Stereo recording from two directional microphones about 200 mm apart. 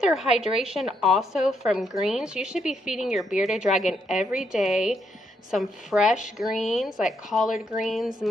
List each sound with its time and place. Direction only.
0.0 s speech: 5° right (ahead or behind)